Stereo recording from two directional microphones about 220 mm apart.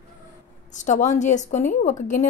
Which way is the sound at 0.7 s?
35° left (ahead or behind).